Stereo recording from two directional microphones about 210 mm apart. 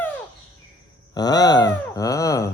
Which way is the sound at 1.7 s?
15° left (ahead or behind).